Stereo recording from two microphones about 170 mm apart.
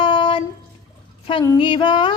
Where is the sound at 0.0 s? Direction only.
30° left (ahead or behind).